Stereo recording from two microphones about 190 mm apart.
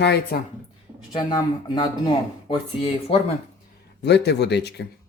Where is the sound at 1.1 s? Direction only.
25° left (ahead or behind).